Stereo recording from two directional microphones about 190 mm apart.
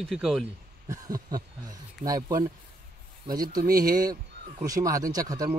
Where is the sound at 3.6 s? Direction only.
50° right (ahead or behind).